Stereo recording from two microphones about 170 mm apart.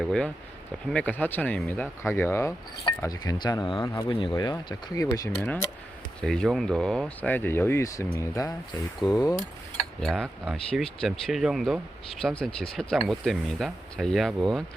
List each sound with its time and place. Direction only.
0.0 s speech: 5° left (ahead or behind); by 5.3 s 20° left (ahead or behind)
5.4 s speech: 10° left (ahead or behind)
10.0 s speech: 5° left (ahead or behind)